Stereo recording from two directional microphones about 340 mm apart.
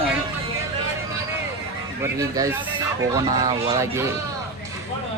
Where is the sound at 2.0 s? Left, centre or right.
Centre.